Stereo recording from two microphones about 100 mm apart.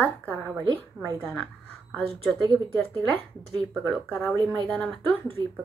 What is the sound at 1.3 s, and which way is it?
Speech, 10° left (ahead or behind).